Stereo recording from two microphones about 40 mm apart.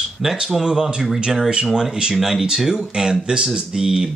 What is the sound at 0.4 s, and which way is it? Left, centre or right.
Speech, centre.